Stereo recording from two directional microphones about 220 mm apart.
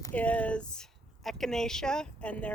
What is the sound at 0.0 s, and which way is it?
Speech, 5° left (ahead or behind).